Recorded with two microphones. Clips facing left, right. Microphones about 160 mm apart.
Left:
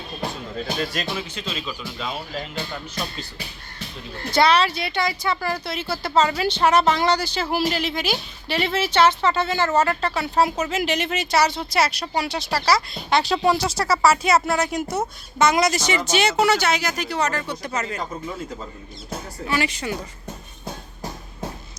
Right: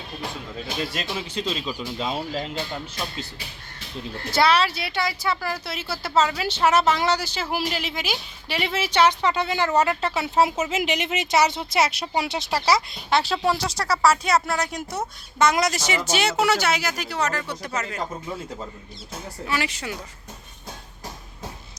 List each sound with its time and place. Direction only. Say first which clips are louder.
1.0 s speech: left 2 dB; 20° right (ahead or behind)
1.3 s speech: right 3 dB; 35° right (ahead or behind)
4.3 s speech: left 2 dB; 5° right (ahead or behind); by 12.8 s 20° right (ahead or behind)
13.1 s speech: left 3 dB; 5° right (ahead or behind)
19.5 s speech: left 4 dB; 5° right (ahead or behind)